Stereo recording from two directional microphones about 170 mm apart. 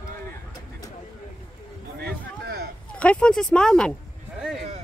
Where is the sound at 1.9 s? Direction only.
70° right (ahead or behind).